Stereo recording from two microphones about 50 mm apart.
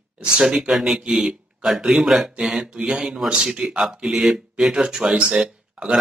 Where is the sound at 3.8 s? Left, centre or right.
Centre.